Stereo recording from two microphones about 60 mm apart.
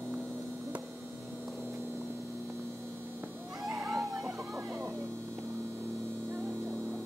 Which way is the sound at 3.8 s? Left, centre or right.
Centre.